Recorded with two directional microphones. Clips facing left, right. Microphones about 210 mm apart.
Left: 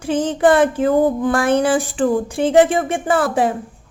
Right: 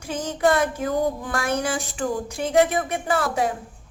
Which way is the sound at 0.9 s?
55° left (ahead or behind).